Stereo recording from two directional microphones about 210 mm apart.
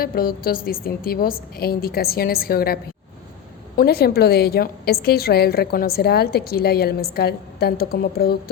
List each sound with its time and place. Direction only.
0.0 s a woman's voice: 45° left (ahead or behind)
3.8 s a woman's voice: 50° left (ahead or behind)